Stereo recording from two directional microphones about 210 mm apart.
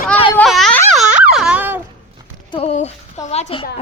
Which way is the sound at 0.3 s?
5° left (ahead or behind).